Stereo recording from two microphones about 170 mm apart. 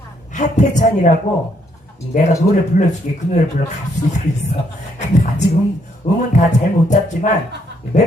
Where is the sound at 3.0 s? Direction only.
50° left (ahead or behind).